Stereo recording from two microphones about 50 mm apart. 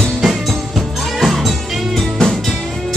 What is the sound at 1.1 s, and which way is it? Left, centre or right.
Music, centre.